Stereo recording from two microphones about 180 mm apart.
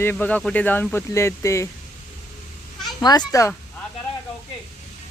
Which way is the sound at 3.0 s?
20° left (ahead or behind).